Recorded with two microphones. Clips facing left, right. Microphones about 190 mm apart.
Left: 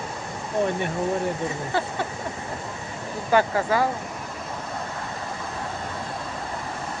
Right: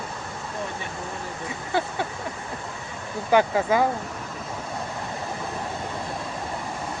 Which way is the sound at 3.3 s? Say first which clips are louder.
Right 1 dB; 15° right (ahead or behind).